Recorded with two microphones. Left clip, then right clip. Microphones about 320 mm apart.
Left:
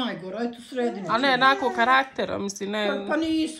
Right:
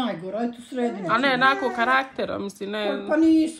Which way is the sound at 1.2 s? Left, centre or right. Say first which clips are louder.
Left 1 dB; centre.